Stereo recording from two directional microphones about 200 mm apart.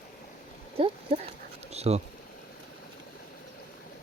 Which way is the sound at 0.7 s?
30° right (ahead or behind).